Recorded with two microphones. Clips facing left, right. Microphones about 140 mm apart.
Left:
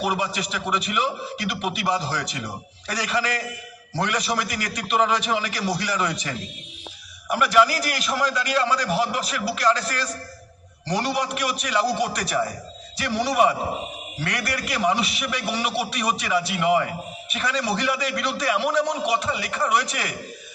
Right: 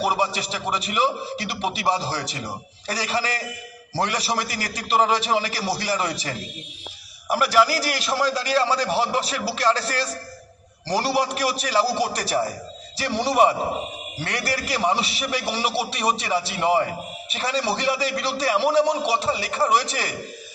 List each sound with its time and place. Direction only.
0.0 s a man's voice: 30° right (ahead or behind)